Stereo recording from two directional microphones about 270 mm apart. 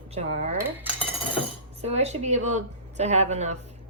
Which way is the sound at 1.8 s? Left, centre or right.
Right.